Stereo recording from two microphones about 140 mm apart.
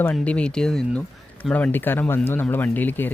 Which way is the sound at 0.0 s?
10° left (ahead or behind).